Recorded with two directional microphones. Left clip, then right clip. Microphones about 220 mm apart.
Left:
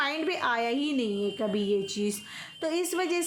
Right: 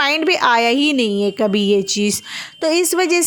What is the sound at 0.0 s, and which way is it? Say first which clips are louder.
Speech: right 13 dB; 45° right (ahead or behind).